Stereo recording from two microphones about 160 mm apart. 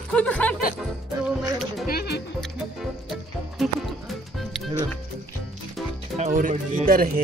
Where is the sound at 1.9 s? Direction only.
80° left.